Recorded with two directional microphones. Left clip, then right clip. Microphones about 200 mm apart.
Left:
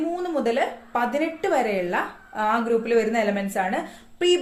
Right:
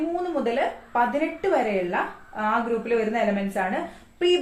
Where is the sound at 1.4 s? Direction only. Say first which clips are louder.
Even; 55° left (ahead or behind).